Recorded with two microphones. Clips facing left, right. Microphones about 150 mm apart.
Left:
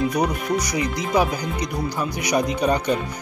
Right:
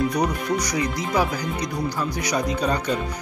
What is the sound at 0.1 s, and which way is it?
Speech, 15° left (ahead or behind).